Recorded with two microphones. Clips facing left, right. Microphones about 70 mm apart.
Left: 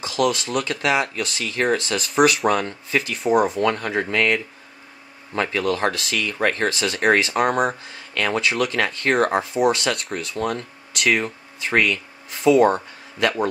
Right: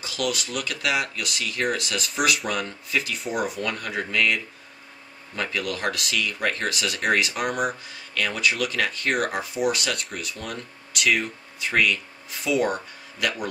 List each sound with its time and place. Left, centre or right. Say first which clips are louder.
0.0 s speech: left 7 dB; left